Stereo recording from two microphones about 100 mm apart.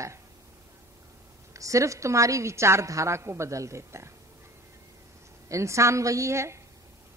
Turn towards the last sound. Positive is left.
turn(degrees=-30)  # may be behind; listen again after turning